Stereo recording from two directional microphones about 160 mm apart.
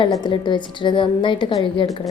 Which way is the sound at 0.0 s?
30° left (ahead or behind).